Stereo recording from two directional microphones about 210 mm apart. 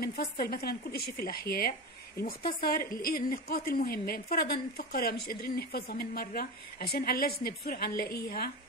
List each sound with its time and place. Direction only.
0.0 s a woman's voice: 45° left (ahead or behind)